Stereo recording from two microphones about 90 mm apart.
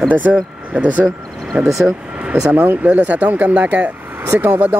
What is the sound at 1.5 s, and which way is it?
Speech, 10° right (ahead or behind).